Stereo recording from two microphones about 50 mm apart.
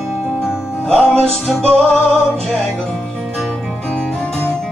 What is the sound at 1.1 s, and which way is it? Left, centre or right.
Music, centre.